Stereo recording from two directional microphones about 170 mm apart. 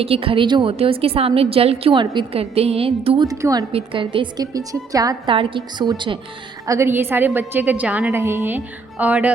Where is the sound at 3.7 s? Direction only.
35° right (ahead or behind).